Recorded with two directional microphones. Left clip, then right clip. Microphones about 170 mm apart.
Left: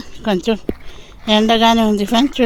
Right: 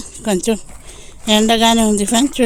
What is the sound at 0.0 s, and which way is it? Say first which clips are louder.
Speech: even; 15° right (ahead or behind).